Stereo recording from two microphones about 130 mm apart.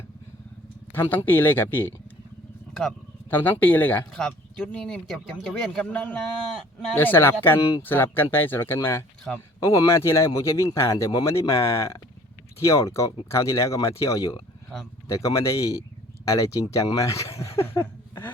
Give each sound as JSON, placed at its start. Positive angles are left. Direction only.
{"t": 0.9, "sound": "speech", "side_deg": 15}
{"t": 3.2, "sound": "speech", "side_deg": 15}
{"t": 9.3, "sound": "speech", "side_deg": 0}
{"t": 9.6, "sound": "speech", "side_deg": 25}
{"t": 16.7, "sound": "a sound", "side_deg": 25}